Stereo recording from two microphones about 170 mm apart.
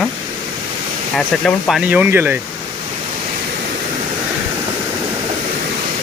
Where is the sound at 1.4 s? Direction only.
5° left (ahead or behind).